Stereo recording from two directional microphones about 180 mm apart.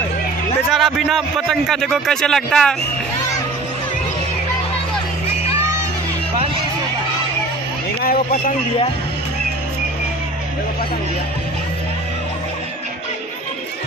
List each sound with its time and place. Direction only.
0.7 s a man's voice: centre (ahead or behind)
8.0 s speech: 55° left (ahead or behind)